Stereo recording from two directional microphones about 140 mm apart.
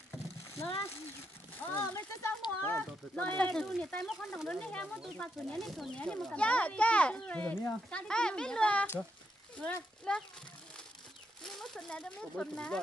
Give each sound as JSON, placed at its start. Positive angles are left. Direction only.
{"t": 1.6, "sound": "a child's voice", "side_deg": 15}
{"t": 11.5, "sound": "speech", "side_deg": 5}